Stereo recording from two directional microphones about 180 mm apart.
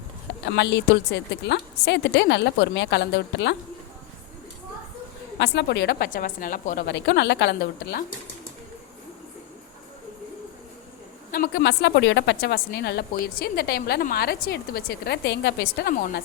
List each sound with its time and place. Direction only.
0.4 s a woman's voice: 75° left (ahead or behind)
5.4 s a woman's voice: 75° left (ahead or behind)
11.5 s speech: 80° left; by 16.1 s 50° left (ahead or behind)